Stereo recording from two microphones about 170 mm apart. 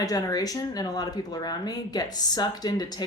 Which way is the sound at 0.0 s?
20° left (ahead or behind).